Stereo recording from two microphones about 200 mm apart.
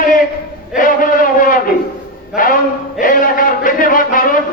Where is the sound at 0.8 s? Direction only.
45° left (ahead or behind).